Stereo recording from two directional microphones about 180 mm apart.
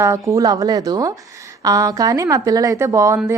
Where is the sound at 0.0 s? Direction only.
15° right (ahead or behind).